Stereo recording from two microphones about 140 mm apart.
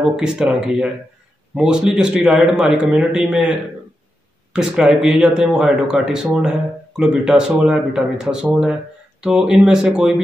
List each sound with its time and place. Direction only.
0.0 s speech: 5° right (ahead or behind)